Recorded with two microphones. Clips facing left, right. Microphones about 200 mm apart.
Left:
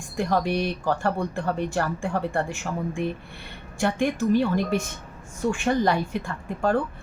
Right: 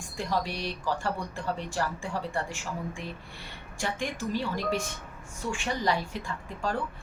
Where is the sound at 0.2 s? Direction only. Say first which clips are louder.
Left 7 dB; 60° left (ahead or behind).